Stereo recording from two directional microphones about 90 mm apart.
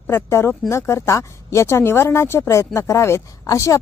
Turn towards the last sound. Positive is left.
turn(degrees=35)  # may be behind; listen again after turning